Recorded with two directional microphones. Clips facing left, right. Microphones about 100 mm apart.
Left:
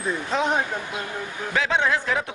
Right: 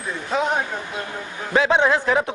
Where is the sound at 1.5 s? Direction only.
20° right (ahead or behind).